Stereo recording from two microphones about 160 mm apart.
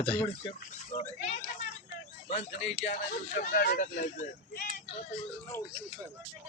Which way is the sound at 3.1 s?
65° left (ahead or behind).